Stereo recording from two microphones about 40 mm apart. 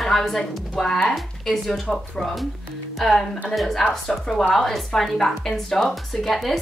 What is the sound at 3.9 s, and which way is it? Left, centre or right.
A woman's voice, centre.